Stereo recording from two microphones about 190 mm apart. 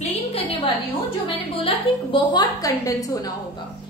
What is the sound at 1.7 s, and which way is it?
A woman's voice, 25° left (ahead or behind).